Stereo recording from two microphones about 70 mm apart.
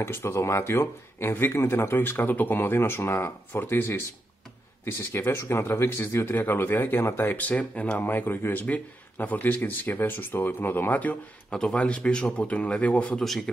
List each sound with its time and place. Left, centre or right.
0.0 s speech: left
11.5 s speech: centre